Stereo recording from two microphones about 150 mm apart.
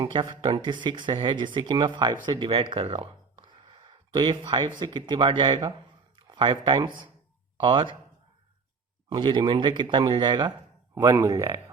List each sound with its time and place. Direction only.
0.0 s speech: 30° right (ahead or behind)
9.1 s speech: 30° right (ahead or behind)